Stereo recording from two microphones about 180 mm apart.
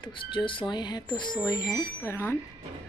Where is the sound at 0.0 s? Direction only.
25° left (ahead or behind).